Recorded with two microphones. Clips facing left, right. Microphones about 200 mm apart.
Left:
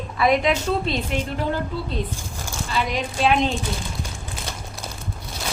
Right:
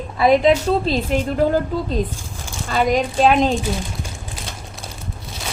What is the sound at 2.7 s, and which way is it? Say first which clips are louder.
Speech: right 8 dB; 45° right (ahead or behind).